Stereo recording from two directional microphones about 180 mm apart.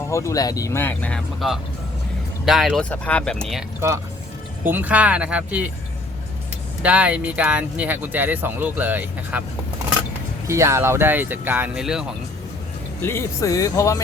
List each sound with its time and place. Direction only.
0.1 s speech: 15° left (ahead or behind)
3.8 s speech: 15° right (ahead or behind)
6.8 s speech: 5° right (ahead or behind)
10.4 s speech: 15° right (ahead or behind)
13.0 s speech: 15° left (ahead or behind)